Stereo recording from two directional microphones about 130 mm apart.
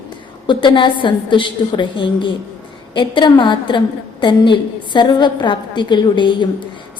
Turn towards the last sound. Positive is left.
turn(degrees=35)  # may be behind; listen again after turning